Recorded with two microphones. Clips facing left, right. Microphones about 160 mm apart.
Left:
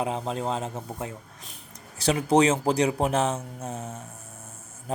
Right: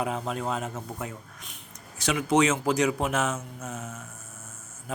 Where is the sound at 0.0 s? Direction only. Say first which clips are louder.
Left 1 dB; 30° left (ahead or behind).